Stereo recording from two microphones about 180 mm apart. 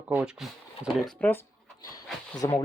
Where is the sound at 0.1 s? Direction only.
5° right (ahead or behind).